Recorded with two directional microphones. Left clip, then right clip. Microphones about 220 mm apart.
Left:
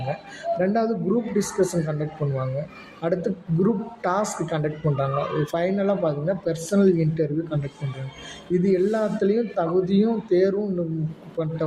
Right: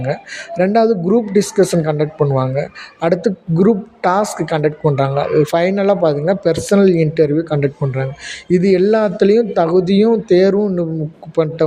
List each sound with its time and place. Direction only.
0.5 s a woman's voice: 35° right (ahead or behind)